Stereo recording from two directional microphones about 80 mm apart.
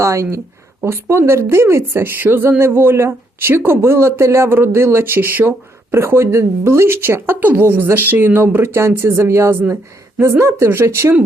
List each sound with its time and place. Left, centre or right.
0.0 s a woman's voice: right
10.2 s a woman's voice: right